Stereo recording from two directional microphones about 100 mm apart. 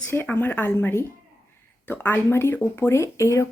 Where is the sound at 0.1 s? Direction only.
20° left (ahead or behind).